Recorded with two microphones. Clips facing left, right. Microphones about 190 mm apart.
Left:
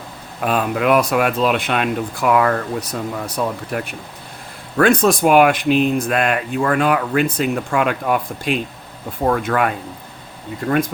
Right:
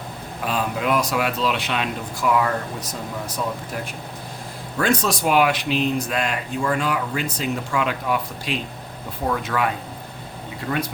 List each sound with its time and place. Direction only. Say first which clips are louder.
0.4 s speech: left 6 dB; 60° left (ahead or behind)
4.8 s speech: left 7 dB; 55° left (ahead or behind)